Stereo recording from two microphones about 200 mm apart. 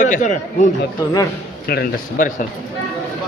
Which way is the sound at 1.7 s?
45° left (ahead or behind).